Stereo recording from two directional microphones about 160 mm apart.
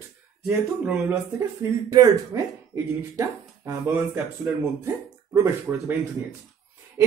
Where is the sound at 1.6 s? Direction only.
20° right (ahead or behind).